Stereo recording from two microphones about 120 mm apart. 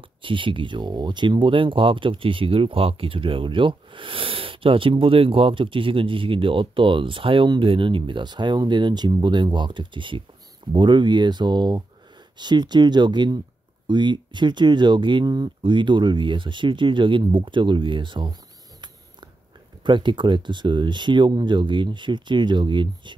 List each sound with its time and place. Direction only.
0.2 s speech: 45° right (ahead or behind)
19.8 s speech: 40° right (ahead or behind)